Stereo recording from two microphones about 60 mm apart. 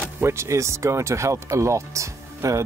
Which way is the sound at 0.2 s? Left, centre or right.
Right.